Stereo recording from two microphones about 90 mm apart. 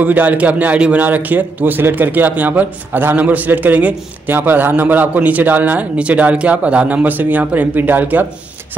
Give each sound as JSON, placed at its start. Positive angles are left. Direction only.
{"t": 0.0, "sound": "speech", "side_deg": -20}